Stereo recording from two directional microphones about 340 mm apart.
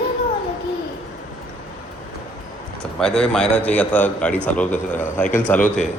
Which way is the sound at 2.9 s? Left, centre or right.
Centre.